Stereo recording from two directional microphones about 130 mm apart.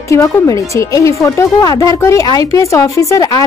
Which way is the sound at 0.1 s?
25° left (ahead or behind).